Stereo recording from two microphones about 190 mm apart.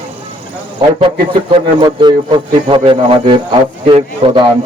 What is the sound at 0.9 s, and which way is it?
A man's voice, 30° right (ahead or behind).